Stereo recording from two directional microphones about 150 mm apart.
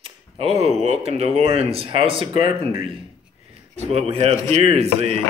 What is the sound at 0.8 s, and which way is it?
Speech, 45° right (ahead or behind).